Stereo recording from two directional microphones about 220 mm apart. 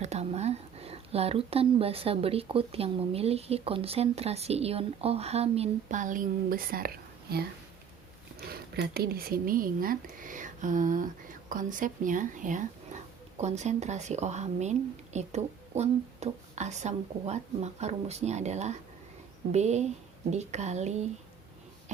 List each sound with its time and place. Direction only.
0.0 s speech: 30° right (ahead or behind)